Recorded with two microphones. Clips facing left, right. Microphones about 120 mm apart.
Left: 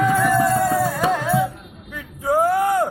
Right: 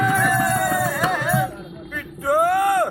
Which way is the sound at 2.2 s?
25° left (ahead or behind).